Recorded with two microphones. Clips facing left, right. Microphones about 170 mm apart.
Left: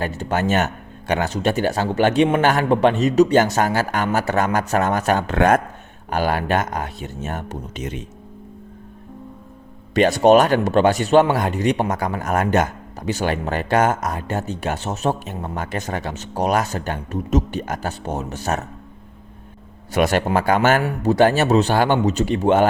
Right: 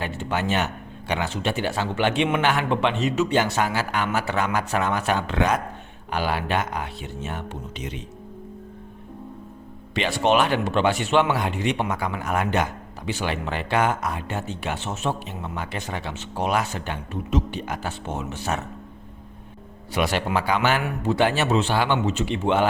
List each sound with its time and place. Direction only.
0.0 s speech: 40° left (ahead or behind)
9.9 s speech: 40° left (ahead or behind)
19.9 s speech: 45° left (ahead or behind)